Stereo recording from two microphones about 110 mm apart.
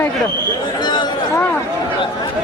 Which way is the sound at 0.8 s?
40° left (ahead or behind).